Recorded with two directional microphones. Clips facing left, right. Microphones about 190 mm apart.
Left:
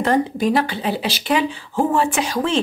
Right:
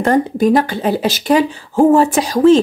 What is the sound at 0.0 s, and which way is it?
Speech, 45° right (ahead or behind).